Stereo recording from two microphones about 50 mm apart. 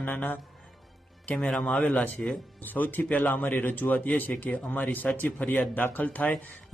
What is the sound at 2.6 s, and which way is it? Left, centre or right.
A man's voice, left.